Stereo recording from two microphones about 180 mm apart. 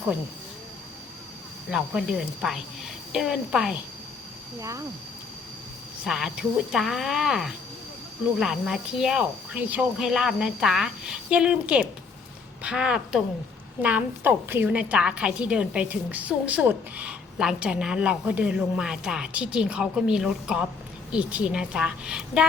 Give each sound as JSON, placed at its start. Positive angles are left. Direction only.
{"t": 1.7, "sound": "speech", "side_deg": -5}
{"t": 6.1, "sound": "a woman's voice", "side_deg": -5}